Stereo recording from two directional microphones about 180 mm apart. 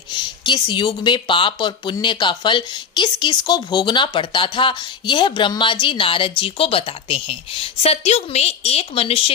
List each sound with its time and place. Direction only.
0.1 s speech: 25° left (ahead or behind)